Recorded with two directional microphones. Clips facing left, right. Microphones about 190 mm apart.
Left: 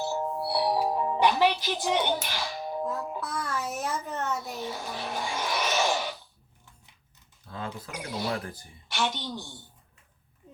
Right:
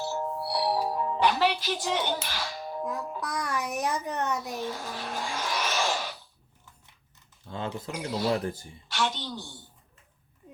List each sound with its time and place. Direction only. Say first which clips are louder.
0.0 s music: left 2 dB; 20° left (ahead or behind)
3.2 s a child's voice: right 1 dB; 15° right (ahead or behind)
4.5 s speech: right 1 dB; 15° left (ahead or behind)
7.5 s speech: right 3 dB; 25° right (ahead or behind)
8.9 s a woman's voice: even; 15° left (ahead or behind)